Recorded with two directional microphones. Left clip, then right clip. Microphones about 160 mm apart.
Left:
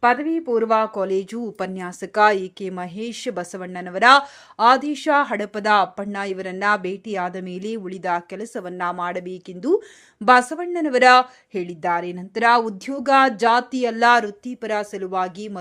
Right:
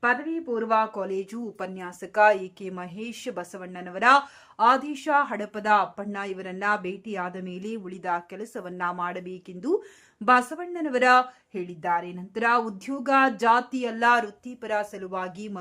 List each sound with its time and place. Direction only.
0.0 s speech: 35° left (ahead or behind)